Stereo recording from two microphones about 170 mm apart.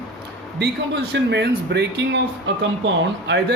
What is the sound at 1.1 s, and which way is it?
A man's voice, 90° right.